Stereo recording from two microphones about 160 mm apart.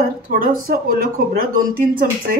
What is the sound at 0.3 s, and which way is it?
Speech, 60° right (ahead or behind).